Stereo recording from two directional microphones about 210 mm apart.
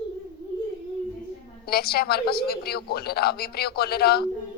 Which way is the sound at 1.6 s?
50° left (ahead or behind).